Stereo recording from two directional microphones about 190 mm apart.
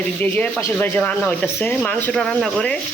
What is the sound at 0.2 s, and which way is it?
Speech, 10° left (ahead or behind).